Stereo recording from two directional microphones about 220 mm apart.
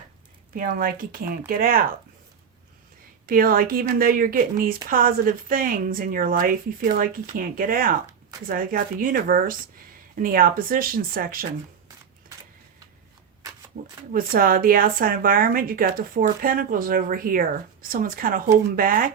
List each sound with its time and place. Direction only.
0.5 s a woman's voice: 40° right (ahead or behind)
3.2 s a woman's voice: 40° right (ahead or behind)
13.7 s a woman's voice: 40° right (ahead or behind)